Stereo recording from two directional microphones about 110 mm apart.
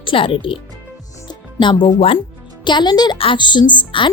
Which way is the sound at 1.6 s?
45° left (ahead or behind).